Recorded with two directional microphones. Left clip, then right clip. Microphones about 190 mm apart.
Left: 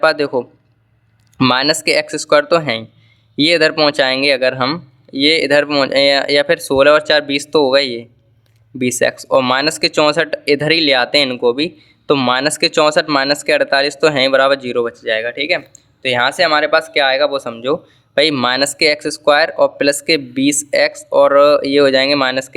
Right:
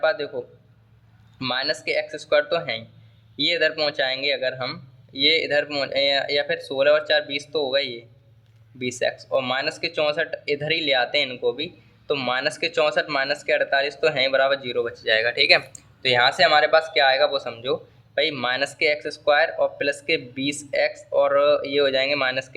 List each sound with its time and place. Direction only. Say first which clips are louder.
0.0 s speech: left 9 dB; 40° left (ahead or behind); by 15.6 s 25° left (ahead or behind)
16.0 s speech: left 4 dB; 40° left (ahead or behind)